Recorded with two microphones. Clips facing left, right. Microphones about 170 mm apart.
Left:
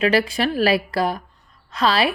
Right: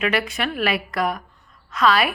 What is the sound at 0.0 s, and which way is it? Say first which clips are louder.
A woman's voice: left 4 dB; 35° left (ahead or behind).